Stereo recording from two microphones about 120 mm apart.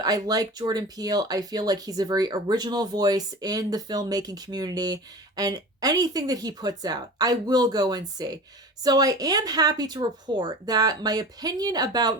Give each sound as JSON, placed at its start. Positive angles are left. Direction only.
{"t": 0.0, "sound": "speech", "side_deg": -30}